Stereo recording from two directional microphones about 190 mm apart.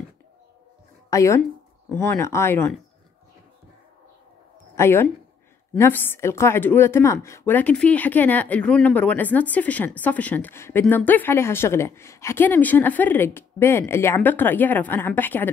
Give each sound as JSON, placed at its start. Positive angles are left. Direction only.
{"t": 1.1, "sound": "a woman's voice", "side_deg": 15}
{"t": 4.7, "sound": "a woman's voice", "side_deg": 10}